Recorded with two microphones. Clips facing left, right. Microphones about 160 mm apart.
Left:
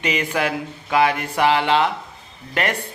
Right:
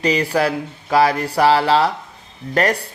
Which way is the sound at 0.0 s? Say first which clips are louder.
Right 5 dB; 35° right (ahead or behind).